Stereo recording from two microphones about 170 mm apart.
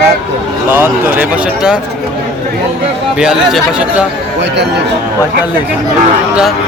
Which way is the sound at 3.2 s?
5° right (ahead or behind).